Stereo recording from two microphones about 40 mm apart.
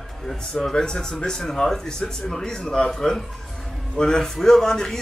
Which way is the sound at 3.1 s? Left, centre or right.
Centre.